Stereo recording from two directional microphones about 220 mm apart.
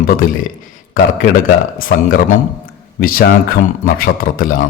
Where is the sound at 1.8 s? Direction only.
40° left (ahead or behind).